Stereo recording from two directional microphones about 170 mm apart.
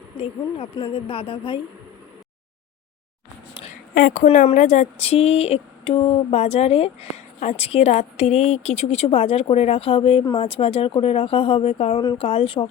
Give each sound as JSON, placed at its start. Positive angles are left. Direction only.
{"t": 0.2, "sound": "speech", "side_deg": 30}
{"t": 3.7, "sound": "a sound", "side_deg": 55}
{"t": 4.3, "sound": "speech", "side_deg": 40}